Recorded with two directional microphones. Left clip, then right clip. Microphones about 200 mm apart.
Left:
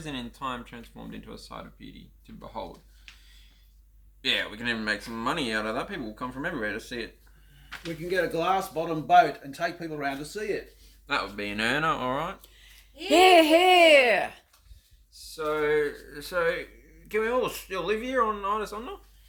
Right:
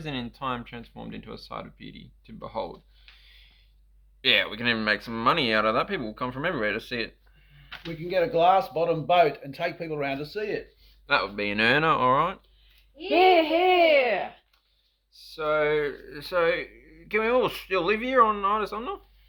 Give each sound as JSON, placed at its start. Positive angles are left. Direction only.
{"t": 0.0, "sound": "speech", "side_deg": -35}
{"t": 3.2, "sound": "a sound", "side_deg": -35}
{"t": 4.2, "sound": "speech", "side_deg": -35}
{"t": 8.1, "sound": "speech", "side_deg": -30}
{"t": 13.1, "sound": "speech", "side_deg": 55}
{"t": 15.1, "sound": "speech", "side_deg": -25}